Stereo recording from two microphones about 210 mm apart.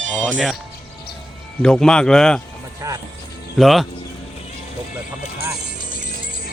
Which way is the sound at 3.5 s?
Centre (ahead or behind).